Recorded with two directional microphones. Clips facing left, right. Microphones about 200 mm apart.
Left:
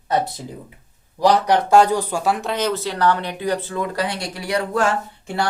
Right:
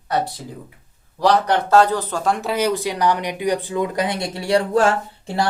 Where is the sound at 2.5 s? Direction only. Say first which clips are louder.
Right 2 dB; 10° right (ahead or behind); by 4.9 s 30° right (ahead or behind).